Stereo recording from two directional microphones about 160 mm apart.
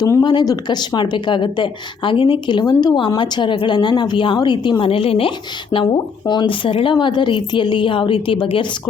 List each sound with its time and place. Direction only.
0.0 s a woman's voice: 25° left (ahead or behind)